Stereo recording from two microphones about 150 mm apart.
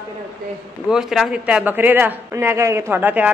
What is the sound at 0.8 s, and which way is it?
Speech, centre (ahead or behind).